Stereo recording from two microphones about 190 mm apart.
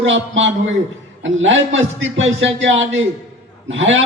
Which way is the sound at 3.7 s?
90° right.